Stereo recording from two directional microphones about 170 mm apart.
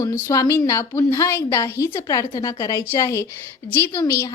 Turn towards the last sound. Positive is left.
turn(degrees=15)  # may be behind; listen again after turning